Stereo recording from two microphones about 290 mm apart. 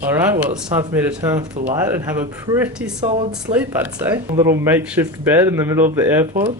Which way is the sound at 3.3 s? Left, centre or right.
Centre.